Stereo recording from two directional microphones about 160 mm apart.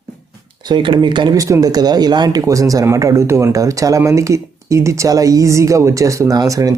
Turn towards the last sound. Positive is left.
turn(degrees=-20)  # may be behind; listen again after turning